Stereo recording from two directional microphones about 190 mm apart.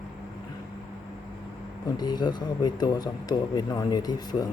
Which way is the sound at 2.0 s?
20° left (ahead or behind).